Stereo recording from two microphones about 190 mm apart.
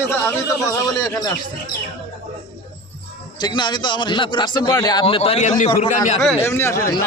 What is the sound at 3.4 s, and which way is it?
Speech, 25° left (ahead or behind).